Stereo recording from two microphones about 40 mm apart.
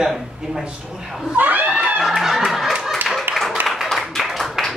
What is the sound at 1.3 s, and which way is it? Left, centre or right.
Speech, right.